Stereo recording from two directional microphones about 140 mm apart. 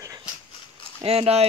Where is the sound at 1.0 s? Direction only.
45° right (ahead or behind).